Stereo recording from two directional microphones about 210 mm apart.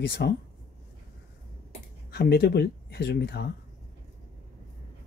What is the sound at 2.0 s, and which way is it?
Speech, 50° left (ahead or behind).